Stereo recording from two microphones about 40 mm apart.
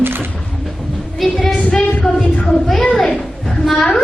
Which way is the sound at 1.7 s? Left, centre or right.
Left.